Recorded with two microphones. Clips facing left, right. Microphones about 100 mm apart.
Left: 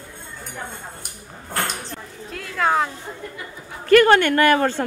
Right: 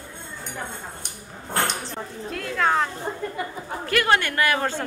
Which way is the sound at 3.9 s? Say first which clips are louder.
Left 9 dB; 50° left (ahead or behind).